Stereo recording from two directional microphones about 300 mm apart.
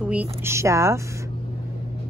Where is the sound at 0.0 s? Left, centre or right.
Centre.